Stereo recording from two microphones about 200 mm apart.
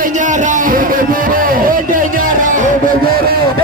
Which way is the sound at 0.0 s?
40° right (ahead or behind).